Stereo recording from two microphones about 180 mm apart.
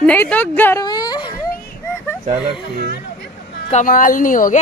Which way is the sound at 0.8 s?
20° left (ahead or behind).